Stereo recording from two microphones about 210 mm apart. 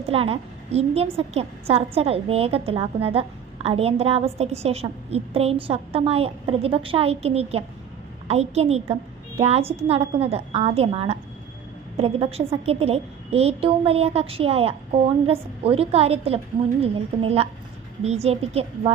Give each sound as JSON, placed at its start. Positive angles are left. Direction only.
{"t": 0.1, "sound": "a woman's voice", "side_deg": -30}